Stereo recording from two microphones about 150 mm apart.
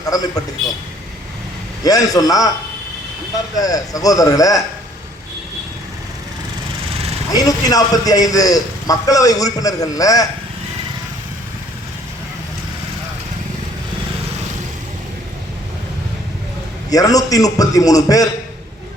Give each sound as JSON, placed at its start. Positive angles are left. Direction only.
{"t": 0.0, "sound": "a man's voice", "side_deg": 25}
{"t": 1.8, "sound": "a man's voice", "side_deg": 25}
{"t": 3.6, "sound": "a man's voice", "side_deg": 25}
{"t": 7.3, "sound": "a man's voice", "side_deg": 25}
{"t": 16.9, "sound": "a man's voice", "side_deg": 25}